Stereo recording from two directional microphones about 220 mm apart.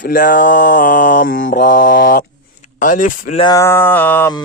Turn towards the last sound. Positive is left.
turn(degrees=15)  # may be behind; listen again after turning